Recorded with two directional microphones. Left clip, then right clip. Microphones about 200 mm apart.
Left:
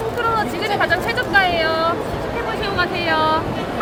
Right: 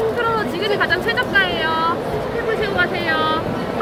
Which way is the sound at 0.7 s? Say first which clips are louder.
Left 1 dB; 30° left (ahead or behind).